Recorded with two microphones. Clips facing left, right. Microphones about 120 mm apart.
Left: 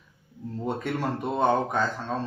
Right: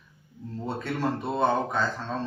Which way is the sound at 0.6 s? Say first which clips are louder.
Even; 15° left (ahead or behind).